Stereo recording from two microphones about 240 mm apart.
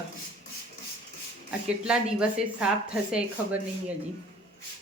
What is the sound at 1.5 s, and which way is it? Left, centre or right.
A woman's voice, centre.